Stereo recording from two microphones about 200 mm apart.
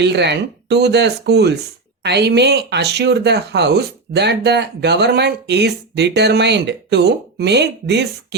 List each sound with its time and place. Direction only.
0.0 s speech: 60° right (ahead or behind)